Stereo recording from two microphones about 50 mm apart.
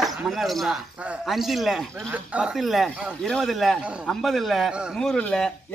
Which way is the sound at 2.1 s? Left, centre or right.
Right.